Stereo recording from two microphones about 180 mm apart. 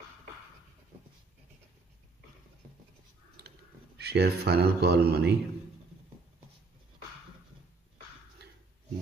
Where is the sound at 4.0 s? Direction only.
65° right (ahead or behind).